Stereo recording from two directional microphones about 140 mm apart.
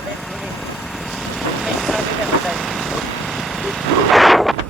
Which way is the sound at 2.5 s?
Centre (ahead or behind).